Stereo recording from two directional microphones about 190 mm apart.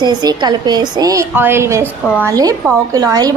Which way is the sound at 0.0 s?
20° right (ahead or behind).